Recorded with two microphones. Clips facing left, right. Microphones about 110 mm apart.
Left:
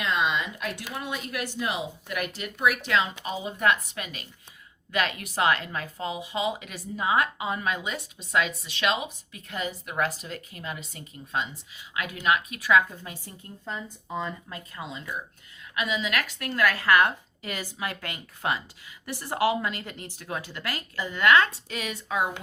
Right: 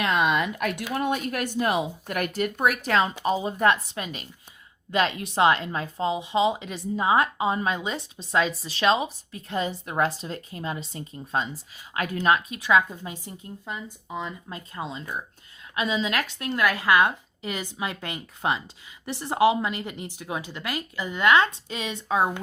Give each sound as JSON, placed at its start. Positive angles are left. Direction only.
{"t": 0.0, "sound": "a woman's voice", "side_deg": -60}
{"t": 14.5, "sound": "a woman's voice", "side_deg": -30}